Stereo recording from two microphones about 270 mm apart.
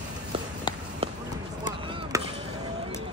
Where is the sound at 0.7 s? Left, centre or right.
Centre.